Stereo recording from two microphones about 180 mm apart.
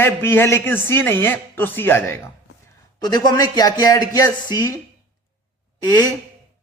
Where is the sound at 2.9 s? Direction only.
20° left (ahead or behind).